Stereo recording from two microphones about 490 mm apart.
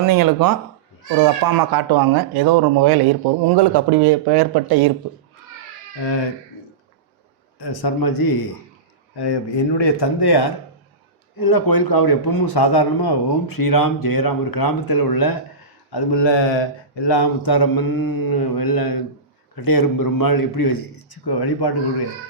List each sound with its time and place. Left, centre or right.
0.0 s speech: right
7.6 s a man's voice: left
9.7 s a man's voice: left